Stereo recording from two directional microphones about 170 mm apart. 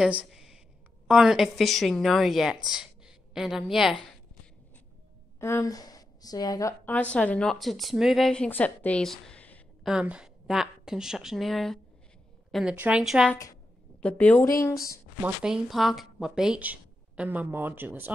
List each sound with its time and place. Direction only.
0.0 s a woman's voice: 5° right (ahead or behind)
5.4 s a woman's voice: 15° left (ahead or behind)
6.9 s a woman's voice: 10° left (ahead or behind)
9.8 s a woman's voice: 5° right (ahead or behind)
12.4 s a sound: centre (ahead or behind)
12.7 s a woman's voice: 5° right (ahead or behind); by 14.5 s 10° left (ahead or behind)
15.4 s a woman's voice: centre (ahead or behind)